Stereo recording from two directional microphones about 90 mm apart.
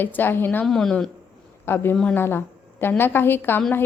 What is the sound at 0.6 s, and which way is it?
Speech, 5° left (ahead or behind).